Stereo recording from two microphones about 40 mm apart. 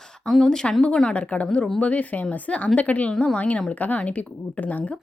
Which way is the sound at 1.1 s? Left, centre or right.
Left.